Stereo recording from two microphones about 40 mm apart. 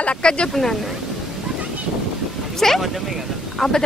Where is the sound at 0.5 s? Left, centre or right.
Centre.